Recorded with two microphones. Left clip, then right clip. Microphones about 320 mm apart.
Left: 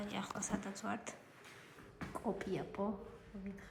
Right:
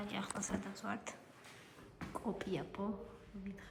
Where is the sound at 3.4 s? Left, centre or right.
Centre.